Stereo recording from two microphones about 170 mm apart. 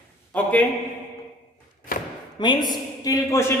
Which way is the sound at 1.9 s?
55° left (ahead or behind).